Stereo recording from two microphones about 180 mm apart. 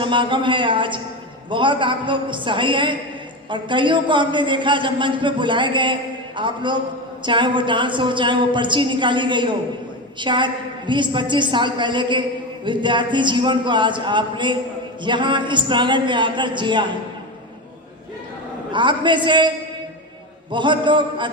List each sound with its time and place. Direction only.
0.0 s a man's voice: 25° right (ahead or behind)
18.7 s a man's voice: 25° right (ahead or behind)